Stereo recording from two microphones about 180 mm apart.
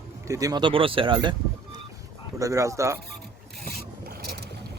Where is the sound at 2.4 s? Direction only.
15° right (ahead or behind).